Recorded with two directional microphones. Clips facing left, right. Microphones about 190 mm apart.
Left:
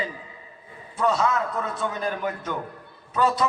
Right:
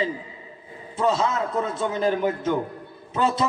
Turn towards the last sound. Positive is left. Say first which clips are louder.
# even
turn(degrees=-25)  # may be behind; listen again after turning